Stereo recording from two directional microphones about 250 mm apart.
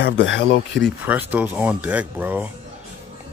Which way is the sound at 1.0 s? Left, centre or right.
Centre.